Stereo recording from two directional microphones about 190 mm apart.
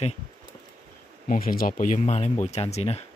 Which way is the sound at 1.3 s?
50° left (ahead or behind).